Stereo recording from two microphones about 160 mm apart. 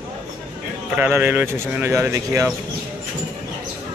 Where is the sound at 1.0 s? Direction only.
10° right (ahead or behind).